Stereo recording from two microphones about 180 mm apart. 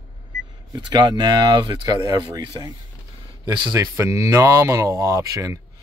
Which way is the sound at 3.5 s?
25° right (ahead or behind).